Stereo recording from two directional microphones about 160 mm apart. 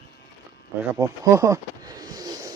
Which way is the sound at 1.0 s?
20° right (ahead or behind).